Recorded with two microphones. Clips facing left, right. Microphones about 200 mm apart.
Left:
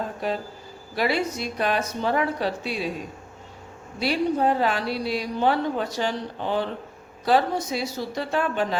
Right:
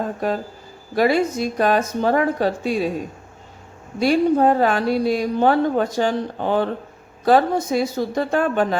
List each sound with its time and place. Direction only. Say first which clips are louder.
0.2 s a woman's voice: right 5 dB; 45° right (ahead or behind)
4.0 s a woman's voice: right 7 dB; 50° right (ahead or behind)